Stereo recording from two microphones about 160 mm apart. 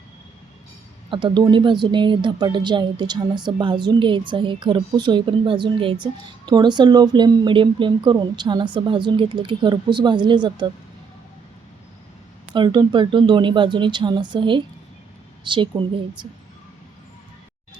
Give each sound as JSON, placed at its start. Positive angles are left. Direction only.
{"t": 1.1, "sound": "a woman's voice", "side_deg": -30}
{"t": 12.5, "sound": "a woman's voice", "side_deg": -30}